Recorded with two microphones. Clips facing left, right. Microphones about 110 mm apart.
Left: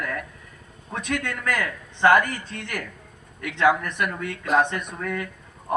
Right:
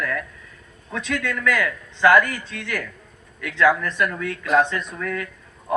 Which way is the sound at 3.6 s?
20° left (ahead or behind).